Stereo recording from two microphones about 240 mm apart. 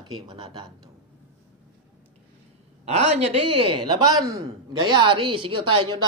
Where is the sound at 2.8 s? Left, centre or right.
Right.